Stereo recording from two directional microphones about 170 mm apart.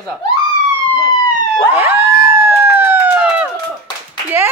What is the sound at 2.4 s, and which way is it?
Emergency vehicle, 15° right (ahead or behind).